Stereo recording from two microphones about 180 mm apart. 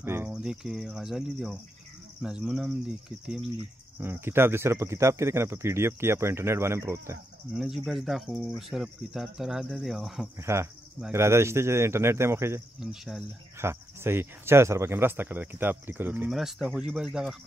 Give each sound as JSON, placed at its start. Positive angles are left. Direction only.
{"t": 0.0, "sound": "speech", "side_deg": -10}
{"t": 7.5, "sound": "speech", "side_deg": 0}
{"t": 10.4, "sound": "speech", "side_deg": -15}
{"t": 12.8, "sound": "speech", "side_deg": 0}
{"t": 13.6, "sound": "speech", "side_deg": -15}